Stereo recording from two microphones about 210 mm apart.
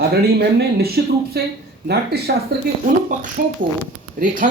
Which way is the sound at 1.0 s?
50° right (ahead or behind).